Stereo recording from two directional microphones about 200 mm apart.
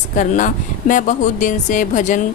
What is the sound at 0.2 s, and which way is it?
Speech, 40° left (ahead or behind).